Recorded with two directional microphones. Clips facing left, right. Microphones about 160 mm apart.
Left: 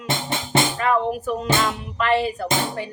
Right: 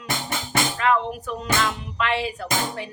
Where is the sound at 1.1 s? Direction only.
5° left (ahead or behind).